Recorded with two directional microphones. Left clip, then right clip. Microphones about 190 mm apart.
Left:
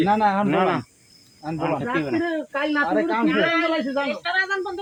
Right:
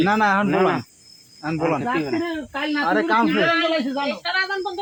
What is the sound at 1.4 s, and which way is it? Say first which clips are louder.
Speech: right 4 dB; 35° right (ahead or behind).